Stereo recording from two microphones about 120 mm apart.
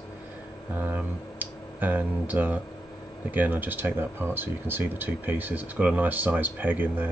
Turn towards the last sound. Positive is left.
turn(degrees=-15)  # may be behind; listen again after turning